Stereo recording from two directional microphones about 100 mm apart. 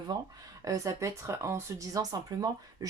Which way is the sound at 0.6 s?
35° right (ahead or behind).